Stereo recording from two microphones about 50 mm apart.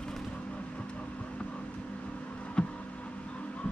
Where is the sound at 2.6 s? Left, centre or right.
Centre.